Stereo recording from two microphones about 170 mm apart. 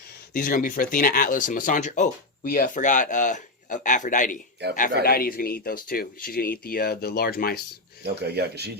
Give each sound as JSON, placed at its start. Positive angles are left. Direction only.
{"t": 0.3, "sound": "speech", "side_deg": 55}
{"t": 4.6, "sound": "a man's voice", "side_deg": -80}
{"t": 5.0, "sound": "speech", "side_deg": 60}
{"t": 8.0, "sound": "speech", "side_deg": -75}